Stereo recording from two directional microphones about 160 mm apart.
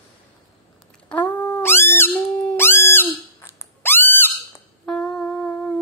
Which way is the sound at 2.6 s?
15° left (ahead or behind).